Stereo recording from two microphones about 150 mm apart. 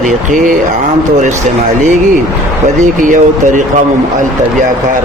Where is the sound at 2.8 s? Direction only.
60° right (ahead or behind).